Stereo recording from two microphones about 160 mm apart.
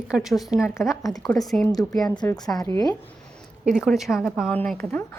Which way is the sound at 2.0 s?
25° left (ahead or behind).